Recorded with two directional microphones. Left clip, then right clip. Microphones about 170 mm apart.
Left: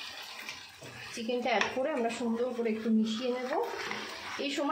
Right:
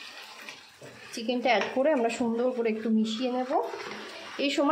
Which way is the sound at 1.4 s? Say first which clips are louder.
Right 5 dB; 35° right (ahead or behind).